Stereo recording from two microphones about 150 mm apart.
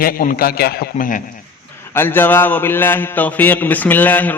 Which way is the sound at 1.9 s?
15° left (ahead or behind).